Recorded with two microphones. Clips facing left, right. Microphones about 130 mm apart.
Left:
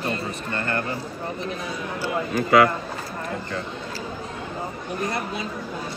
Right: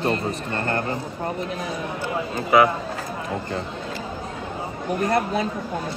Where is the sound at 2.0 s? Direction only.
25° right (ahead or behind).